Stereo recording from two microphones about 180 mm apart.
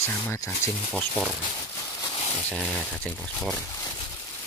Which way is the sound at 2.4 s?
Centre (ahead or behind).